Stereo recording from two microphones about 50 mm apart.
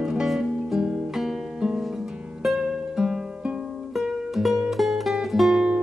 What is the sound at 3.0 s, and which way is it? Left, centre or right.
Music, centre.